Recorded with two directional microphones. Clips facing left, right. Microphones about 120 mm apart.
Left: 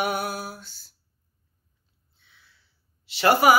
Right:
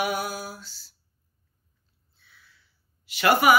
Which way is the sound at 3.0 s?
30° left (ahead or behind).